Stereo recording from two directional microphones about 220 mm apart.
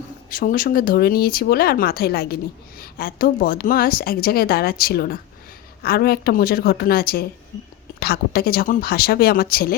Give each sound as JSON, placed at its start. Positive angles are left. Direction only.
{"t": 0.3, "sound": "speech", "side_deg": 40}